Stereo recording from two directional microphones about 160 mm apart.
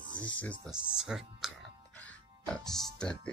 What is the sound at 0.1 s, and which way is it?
Speech, 10° left (ahead or behind).